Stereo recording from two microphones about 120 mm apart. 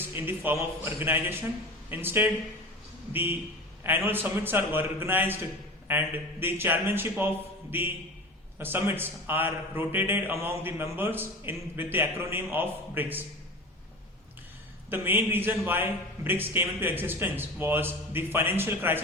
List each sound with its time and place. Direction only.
0.1 s a man's voice: 15° right (ahead or behind)
14.8 s a man's voice: 15° right (ahead or behind)